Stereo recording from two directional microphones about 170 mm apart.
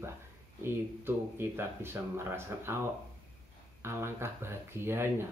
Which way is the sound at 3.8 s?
15° right (ahead or behind).